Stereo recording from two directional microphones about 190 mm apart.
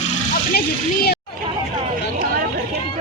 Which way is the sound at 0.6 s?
55° left (ahead or behind).